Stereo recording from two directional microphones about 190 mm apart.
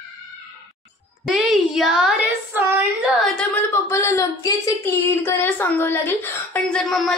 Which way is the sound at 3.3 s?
10° left (ahead or behind).